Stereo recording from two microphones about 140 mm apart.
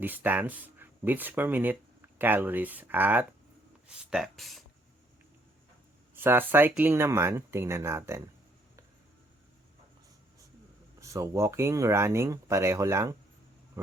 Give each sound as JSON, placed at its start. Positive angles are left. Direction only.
{"t": 0.0, "sound": "speech", "side_deg": -15}
{"t": 6.1, "sound": "speech", "side_deg": -15}
{"t": 11.0, "sound": "speech", "side_deg": -20}